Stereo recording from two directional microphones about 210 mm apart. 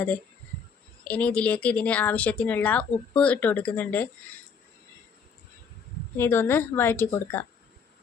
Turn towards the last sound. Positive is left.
turn(degrees=10)  # may be behind; listen again after turning